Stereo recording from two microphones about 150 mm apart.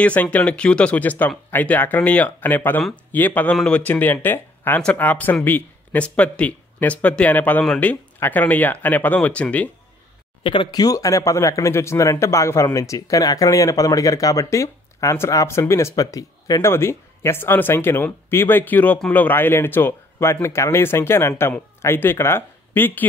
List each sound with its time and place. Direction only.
0.0 s speech: 10° left (ahead or behind)
10.4 s speech: 35° left (ahead or behind); by 23.0 s 15° left (ahead or behind)